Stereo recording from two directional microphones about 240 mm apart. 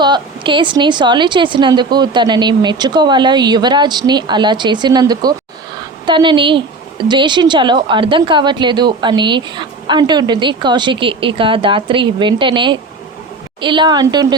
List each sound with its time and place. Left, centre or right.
0.0 s a woman's voice: centre